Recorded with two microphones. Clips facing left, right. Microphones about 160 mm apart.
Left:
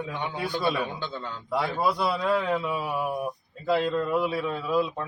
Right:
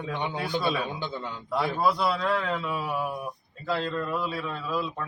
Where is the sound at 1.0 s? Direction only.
15° right (ahead or behind).